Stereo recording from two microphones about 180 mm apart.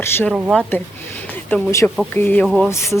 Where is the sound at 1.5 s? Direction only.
10° left (ahead or behind).